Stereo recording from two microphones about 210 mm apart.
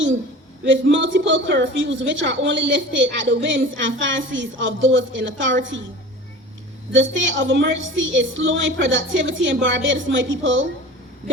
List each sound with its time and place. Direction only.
0.6 s a woman's voice: 60° right (ahead or behind)
6.9 s a woman's voice: 60° right (ahead or behind)